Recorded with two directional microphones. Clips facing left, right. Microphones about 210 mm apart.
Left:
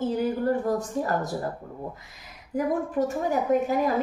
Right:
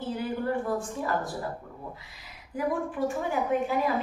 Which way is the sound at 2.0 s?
45° left (ahead or behind).